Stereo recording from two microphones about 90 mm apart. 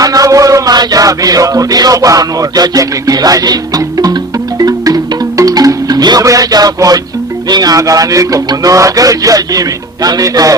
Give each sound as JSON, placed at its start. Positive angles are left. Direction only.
{"t": 0.0, "sound": "speech", "side_deg": -40}
{"t": 5.4, "sound": "music", "side_deg": -40}
{"t": 7.5, "sound": "speech", "side_deg": -45}